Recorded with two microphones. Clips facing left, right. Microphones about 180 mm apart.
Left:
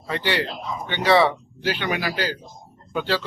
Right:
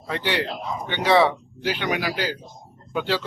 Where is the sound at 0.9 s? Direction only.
10° right (ahead or behind).